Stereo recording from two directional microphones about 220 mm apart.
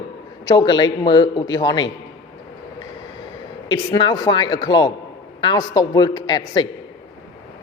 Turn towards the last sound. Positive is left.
turn(degrees=20)  # may be behind; listen again after turning